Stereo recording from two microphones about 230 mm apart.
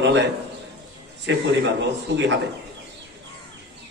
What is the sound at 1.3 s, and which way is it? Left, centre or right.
Speech, right.